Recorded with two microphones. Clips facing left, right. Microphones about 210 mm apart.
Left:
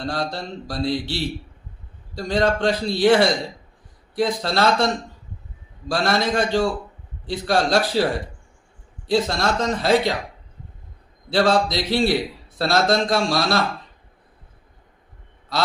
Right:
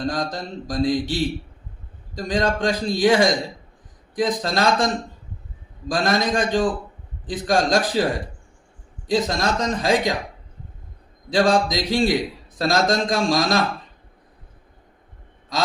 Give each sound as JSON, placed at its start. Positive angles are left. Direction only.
{"t": 0.0, "sound": "a man's voice", "side_deg": -15}
{"t": 5.9, "sound": "a man's voice", "side_deg": -15}
{"t": 11.3, "sound": "a man's voice", "side_deg": -15}